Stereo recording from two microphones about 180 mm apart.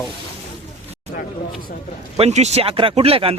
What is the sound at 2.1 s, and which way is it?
Speech, 35° right (ahead or behind).